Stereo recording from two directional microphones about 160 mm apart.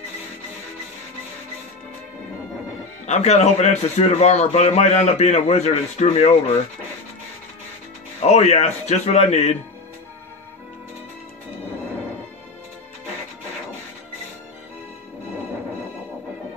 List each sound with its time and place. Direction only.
3.1 s a man's voice: 45° left (ahead or behind)
8.2 s a man's voice: 45° left (ahead or behind)